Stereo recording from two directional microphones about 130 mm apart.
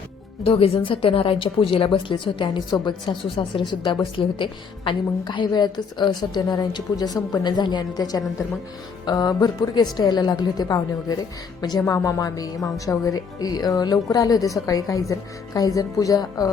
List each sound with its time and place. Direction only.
0.4 s a woman's voice: 45° left (ahead or behind); by 16.5 s 30° left (ahead or behind)